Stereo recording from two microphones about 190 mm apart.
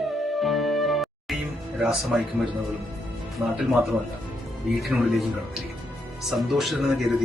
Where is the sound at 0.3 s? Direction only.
Centre (ahead or behind).